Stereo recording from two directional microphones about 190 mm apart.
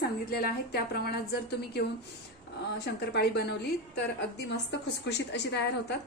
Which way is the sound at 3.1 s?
60° left (ahead or behind).